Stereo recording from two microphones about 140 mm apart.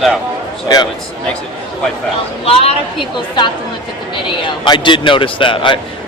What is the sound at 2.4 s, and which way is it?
A woman's voice, 45° left (ahead or behind).